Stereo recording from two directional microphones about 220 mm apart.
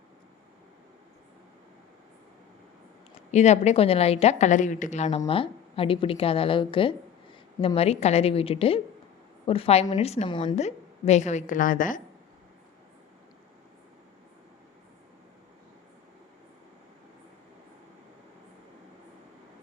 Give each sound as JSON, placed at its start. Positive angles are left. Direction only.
{"t": 3.3, "sound": "a woman's voice", "side_deg": 30}